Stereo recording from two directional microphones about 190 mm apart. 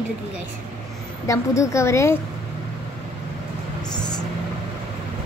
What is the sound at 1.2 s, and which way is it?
Speech, 15° left (ahead or behind).